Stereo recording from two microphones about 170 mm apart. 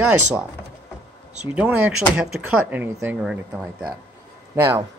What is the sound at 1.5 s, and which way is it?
Speech, 10° right (ahead or behind).